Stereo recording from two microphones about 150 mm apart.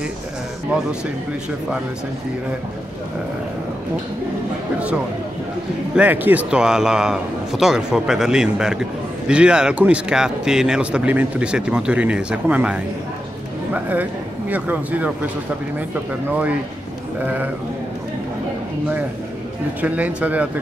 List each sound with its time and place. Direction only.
5.9 s a man's voice: 10° right (ahead or behind)
14.5 s speech: 10° right (ahead or behind)
19.8 s speech: 10° right (ahead or behind)